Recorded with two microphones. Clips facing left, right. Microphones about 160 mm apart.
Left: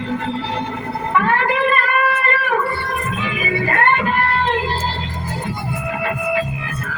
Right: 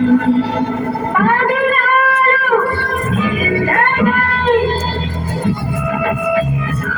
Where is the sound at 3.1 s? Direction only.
45° right (ahead or behind).